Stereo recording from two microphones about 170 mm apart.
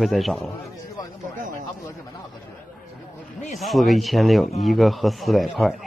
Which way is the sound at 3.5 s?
Centre (ahead or behind).